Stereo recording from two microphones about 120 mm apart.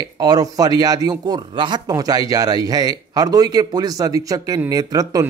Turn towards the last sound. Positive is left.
turn(degrees=-30)  # may be behind; listen again after turning